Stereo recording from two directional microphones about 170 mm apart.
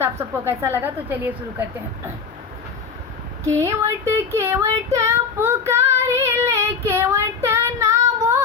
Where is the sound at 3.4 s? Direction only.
15° right (ahead or behind).